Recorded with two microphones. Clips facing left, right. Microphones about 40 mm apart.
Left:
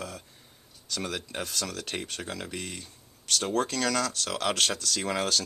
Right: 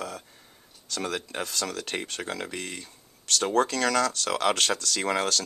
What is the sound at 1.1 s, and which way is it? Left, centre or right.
Speech, centre.